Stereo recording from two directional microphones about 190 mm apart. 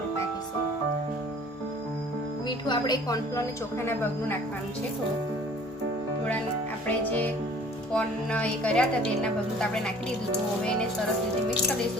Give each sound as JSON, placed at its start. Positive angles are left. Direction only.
{"t": 2.6, "sound": "a woman's voice", "side_deg": 20}
{"t": 6.8, "sound": "a woman's voice", "side_deg": 10}